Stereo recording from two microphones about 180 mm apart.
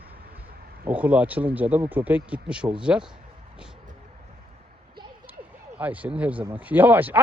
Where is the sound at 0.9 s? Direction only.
10° right (ahead or behind).